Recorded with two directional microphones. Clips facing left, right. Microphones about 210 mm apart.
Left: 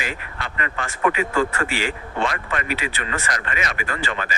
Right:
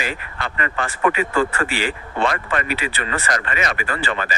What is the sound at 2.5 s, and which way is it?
Speech, 35° right (ahead or behind).